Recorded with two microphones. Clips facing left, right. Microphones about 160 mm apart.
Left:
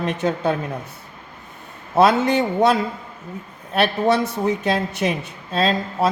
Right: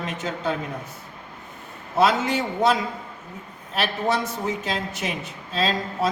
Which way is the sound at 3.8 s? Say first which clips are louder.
Left 6 dB; 60° left (ahead or behind).